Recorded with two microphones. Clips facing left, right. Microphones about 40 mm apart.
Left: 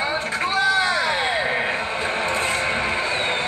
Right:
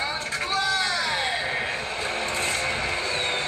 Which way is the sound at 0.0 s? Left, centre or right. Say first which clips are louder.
Left 5 dB; centre.